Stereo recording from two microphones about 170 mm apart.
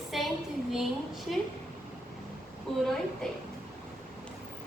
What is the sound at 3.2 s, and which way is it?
Speech, 5° left (ahead or behind).